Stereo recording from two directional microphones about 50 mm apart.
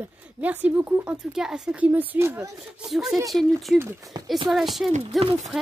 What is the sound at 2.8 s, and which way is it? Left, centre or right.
A child's voice, centre.